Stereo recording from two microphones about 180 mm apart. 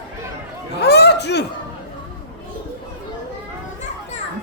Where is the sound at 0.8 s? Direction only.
70° left (ahead or behind).